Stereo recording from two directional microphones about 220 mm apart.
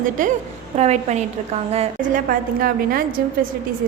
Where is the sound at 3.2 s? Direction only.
40° right (ahead or behind).